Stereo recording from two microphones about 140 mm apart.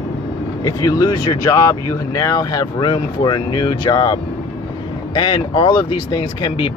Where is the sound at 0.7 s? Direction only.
25° left (ahead or behind).